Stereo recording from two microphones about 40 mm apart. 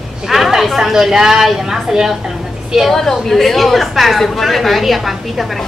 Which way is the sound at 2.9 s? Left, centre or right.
Centre.